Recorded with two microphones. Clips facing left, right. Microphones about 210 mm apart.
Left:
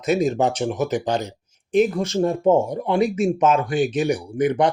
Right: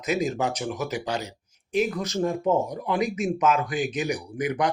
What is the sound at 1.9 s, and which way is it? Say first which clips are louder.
Speech: left 5 dB; 30° left (ahead or behind).